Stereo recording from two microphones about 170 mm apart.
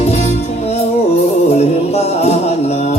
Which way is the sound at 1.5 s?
40° left (ahead or behind).